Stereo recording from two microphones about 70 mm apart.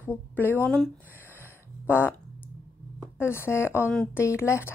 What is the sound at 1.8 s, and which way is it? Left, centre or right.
Fart, left.